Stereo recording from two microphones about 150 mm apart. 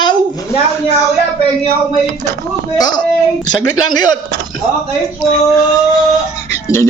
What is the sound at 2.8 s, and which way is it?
Speech, 25° left (ahead or behind).